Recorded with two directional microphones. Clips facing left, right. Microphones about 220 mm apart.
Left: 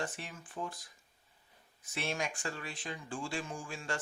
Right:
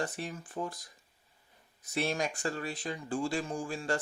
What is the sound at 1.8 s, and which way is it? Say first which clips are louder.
Speech: right 5 dB; 40° right (ahead or behind).